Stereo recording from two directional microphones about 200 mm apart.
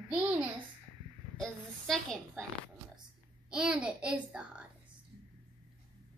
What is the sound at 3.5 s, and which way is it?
A woman's voice, 5° right (ahead or behind).